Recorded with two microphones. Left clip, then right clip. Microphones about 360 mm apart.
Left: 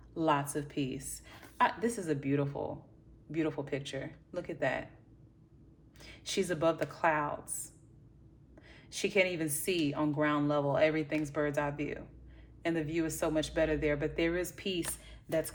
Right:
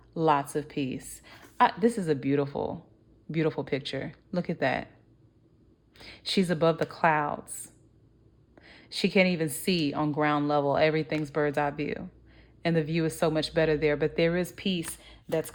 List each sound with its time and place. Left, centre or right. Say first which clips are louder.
0.1 s a woman's voice: right 6 dB; right
6.0 s a woman's voice: right 5 dB; right
15.0 s a sound: right 5 dB; right